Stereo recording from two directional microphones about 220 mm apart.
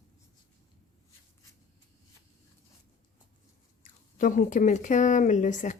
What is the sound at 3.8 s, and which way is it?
Speech, 35° left (ahead or behind).